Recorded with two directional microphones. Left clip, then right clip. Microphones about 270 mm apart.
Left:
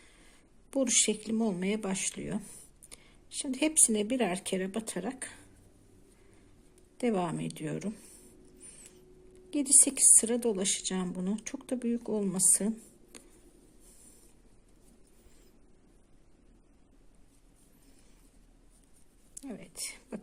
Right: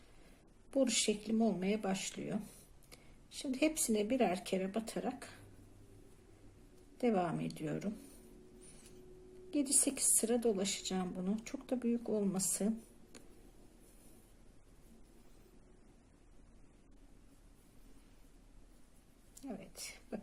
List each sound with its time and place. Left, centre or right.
0.7 s a woman's voice: left
7.0 s a woman's voice: left
9.5 s a woman's voice: left
19.3 s whispering: left